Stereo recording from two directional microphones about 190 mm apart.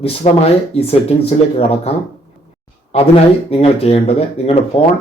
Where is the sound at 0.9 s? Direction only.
30° left (ahead or behind).